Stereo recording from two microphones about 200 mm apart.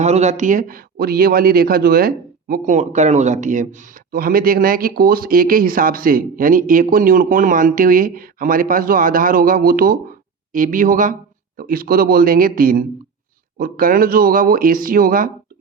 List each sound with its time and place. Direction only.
0.0 s a man's voice: 35° right (ahead or behind)